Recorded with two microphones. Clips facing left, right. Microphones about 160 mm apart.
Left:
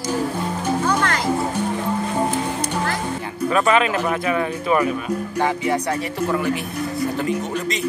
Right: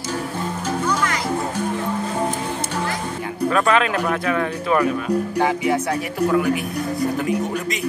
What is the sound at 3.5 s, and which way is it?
Speech, 5° left (ahead or behind).